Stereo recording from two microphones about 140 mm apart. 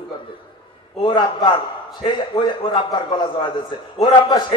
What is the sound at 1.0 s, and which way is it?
A man's voice, 30° left (ahead or behind).